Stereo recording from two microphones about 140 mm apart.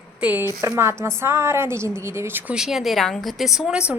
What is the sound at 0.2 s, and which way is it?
A woman's voice, 10° right (ahead or behind).